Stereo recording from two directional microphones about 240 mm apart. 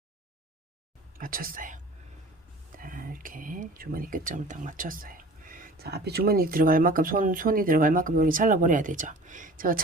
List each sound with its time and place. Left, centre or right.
1.2 s speech: right